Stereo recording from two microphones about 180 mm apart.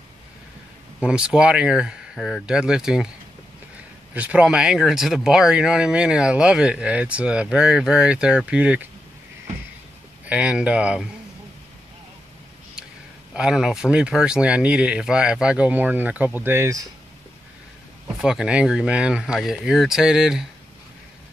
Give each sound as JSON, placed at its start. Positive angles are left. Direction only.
{"t": 1.0, "sound": "speech", "side_deg": -5}
{"t": 4.1, "sound": "speech", "side_deg": -5}
{"t": 10.2, "sound": "speech", "side_deg": -5}
{"t": 13.3, "sound": "speech", "side_deg": -5}
{"t": 18.2, "sound": "speech", "side_deg": -5}